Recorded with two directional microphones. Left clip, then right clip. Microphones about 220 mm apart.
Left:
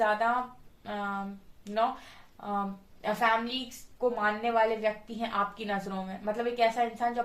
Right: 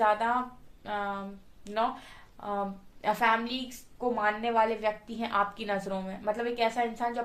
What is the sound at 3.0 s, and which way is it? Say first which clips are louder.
A woman's voice: right 1 dB; 40° right (ahead or behind).